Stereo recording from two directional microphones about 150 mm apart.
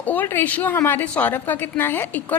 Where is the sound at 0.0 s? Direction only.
10° left (ahead or behind).